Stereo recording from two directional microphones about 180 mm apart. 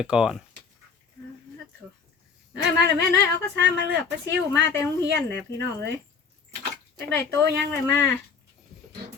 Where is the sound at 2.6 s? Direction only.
70° right (ahead or behind).